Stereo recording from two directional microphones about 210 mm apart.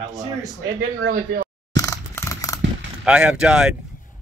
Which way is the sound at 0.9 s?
50° right (ahead or behind).